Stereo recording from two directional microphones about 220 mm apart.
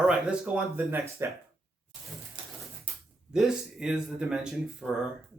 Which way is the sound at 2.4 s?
20° right (ahead or behind).